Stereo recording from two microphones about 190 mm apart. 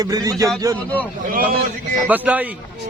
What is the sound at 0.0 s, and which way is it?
Speech, 20° right (ahead or behind).